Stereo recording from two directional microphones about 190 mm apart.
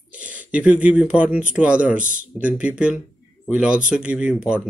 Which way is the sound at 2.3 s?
5° right (ahead or behind).